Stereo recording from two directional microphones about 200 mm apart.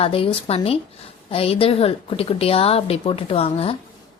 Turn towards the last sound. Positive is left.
turn(degrees=30)  # may be behind; listen again after turning